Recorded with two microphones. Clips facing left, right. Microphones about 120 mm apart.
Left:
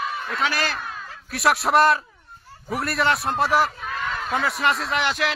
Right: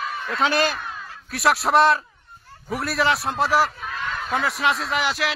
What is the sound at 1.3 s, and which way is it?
A man's voice, centre (ahead or behind).